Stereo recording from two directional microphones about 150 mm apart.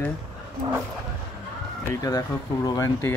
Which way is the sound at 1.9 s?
25° left (ahead or behind).